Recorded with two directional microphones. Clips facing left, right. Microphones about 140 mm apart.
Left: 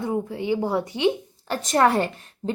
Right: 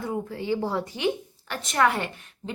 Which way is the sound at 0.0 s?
20° left (ahead or behind).